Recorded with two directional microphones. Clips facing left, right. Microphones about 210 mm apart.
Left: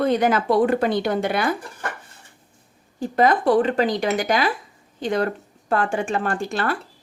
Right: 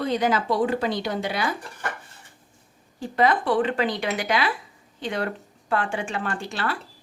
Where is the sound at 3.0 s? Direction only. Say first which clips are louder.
Left 3 dB; 45° left (ahead or behind).